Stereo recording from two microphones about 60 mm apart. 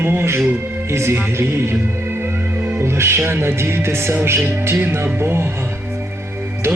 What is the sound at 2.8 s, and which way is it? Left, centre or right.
Music, right.